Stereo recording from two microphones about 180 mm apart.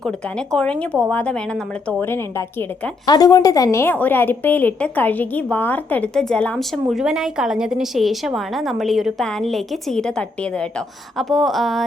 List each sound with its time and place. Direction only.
0.0 s a woman's voice: 5° left (ahead or behind)